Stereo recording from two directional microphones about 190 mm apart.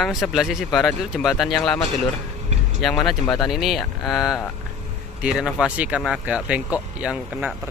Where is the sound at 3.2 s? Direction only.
20° left (ahead or behind).